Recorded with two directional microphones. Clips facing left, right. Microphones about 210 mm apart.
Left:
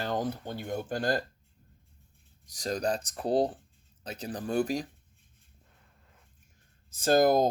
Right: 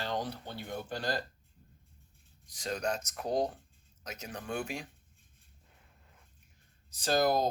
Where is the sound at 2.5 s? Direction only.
40° left (ahead or behind).